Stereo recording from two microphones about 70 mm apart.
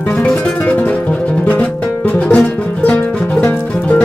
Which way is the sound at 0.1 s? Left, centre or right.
Centre.